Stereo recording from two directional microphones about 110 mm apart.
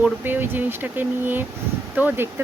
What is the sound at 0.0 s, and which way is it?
Speech, 20° right (ahead or behind).